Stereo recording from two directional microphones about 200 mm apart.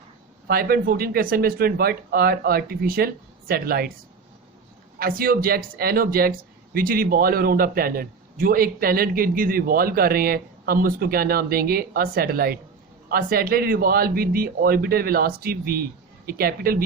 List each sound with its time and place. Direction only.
0.4 s speech: 50° right (ahead or behind)
4.9 s speech: 45° right (ahead or behind)